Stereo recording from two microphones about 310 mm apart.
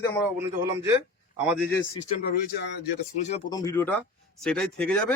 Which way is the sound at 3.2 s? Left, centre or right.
Left.